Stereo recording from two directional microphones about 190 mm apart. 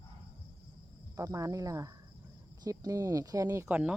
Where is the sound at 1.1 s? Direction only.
15° right (ahead or behind).